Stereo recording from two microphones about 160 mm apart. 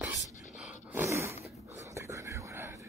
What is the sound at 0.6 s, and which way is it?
Dog, 5° right (ahead or behind).